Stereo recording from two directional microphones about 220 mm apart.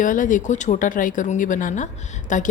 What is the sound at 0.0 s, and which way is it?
A woman's voice, 35° left (ahead or behind).